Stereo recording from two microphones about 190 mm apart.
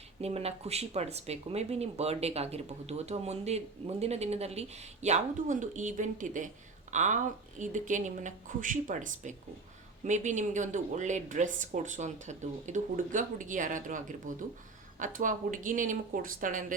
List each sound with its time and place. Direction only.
0.2 s speech: 35° right (ahead or behind)